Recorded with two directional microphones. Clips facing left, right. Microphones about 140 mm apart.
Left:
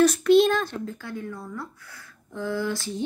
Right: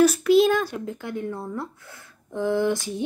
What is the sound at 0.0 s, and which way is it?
A child's voice, 5° right (ahead or behind).